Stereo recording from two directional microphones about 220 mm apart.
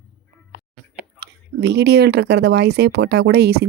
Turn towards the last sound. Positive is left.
turn(degrees=-45)  # may be behind; listen again after turning